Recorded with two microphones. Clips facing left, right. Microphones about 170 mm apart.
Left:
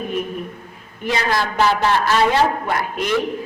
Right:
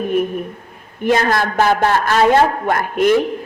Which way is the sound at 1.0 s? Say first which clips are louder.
Right 5 dB; 50° right (ahead or behind).